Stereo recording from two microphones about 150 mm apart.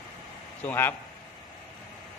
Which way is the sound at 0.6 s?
10° left (ahead or behind).